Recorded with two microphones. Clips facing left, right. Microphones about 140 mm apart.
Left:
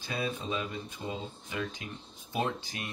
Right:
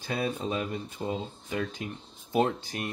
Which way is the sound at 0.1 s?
50° right (ahead or behind).